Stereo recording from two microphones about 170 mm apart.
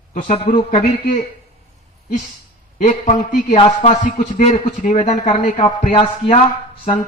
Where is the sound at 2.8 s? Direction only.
45° left (ahead or behind).